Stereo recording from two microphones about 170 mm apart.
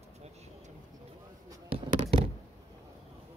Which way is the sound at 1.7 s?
35° right (ahead or behind).